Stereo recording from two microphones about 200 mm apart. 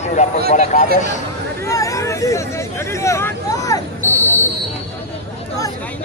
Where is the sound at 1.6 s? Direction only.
15° left (ahead or behind).